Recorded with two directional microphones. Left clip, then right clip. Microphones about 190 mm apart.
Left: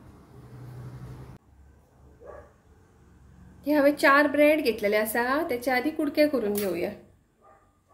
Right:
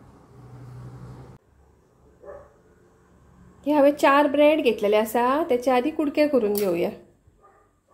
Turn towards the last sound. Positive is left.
turn(degrees=-40)  # may be behind; listen again after turning